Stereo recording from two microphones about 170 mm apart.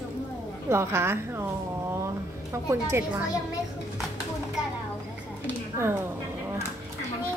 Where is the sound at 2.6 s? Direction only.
15° right (ahead or behind).